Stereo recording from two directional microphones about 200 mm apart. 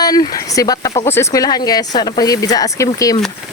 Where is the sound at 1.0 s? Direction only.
15° left (ahead or behind).